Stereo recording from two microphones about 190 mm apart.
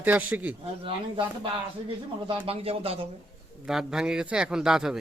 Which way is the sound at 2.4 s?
30° right (ahead or behind).